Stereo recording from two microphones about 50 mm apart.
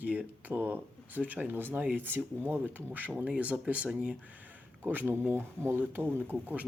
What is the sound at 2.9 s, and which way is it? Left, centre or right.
Speech, right.